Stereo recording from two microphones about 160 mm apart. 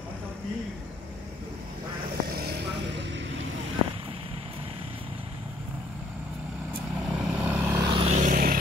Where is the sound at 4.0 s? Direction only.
35° right (ahead or behind).